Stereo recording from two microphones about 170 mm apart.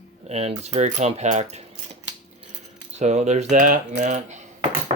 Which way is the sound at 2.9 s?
40° right (ahead or behind).